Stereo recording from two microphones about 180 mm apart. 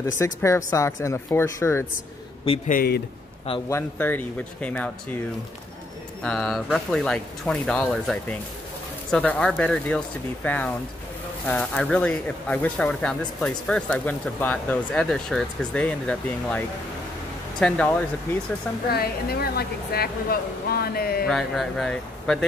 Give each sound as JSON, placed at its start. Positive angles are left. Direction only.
{"t": 0.2, "sound": "speech", "side_deg": 15}
{"t": 2.7, "sound": "a woman's voice", "side_deg": 55}
{"t": 3.6, "sound": "speech", "side_deg": 15}
{"t": 6.2, "sound": "speech", "side_deg": 0}
{"t": 18.9, "sound": "a woman's voice", "side_deg": 60}
{"t": 21.3, "sound": "speech", "side_deg": 0}